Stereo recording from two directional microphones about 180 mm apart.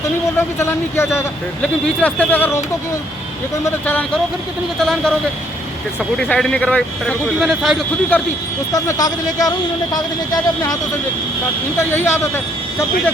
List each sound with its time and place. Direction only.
0.3 s a man's voice: 15° left (ahead or behind)
3.6 s a man's voice: 10° left (ahead or behind)
8.7 s a man's voice: 20° left (ahead or behind)
11.8 s a man's voice: 15° left (ahead or behind)